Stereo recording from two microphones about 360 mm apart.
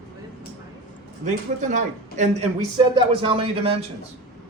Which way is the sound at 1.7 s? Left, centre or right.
Centre.